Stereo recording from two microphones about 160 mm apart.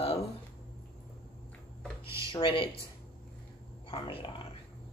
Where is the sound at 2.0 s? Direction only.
20° right (ahead or behind).